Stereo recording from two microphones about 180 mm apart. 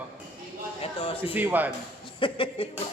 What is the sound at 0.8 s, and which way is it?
Speech, 30° left (ahead or behind).